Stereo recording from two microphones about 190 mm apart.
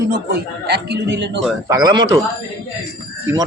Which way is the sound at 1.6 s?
20° right (ahead or behind).